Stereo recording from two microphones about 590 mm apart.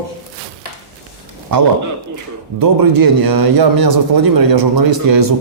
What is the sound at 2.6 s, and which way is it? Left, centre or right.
A man's voice, right.